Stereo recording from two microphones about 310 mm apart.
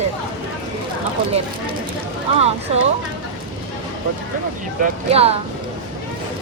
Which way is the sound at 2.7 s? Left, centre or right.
Centre.